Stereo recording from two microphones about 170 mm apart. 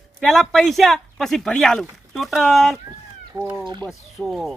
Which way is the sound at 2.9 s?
25° right (ahead or behind).